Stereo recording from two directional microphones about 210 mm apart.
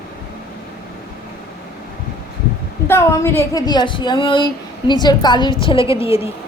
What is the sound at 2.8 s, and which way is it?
A woman's voice, 10° left (ahead or behind).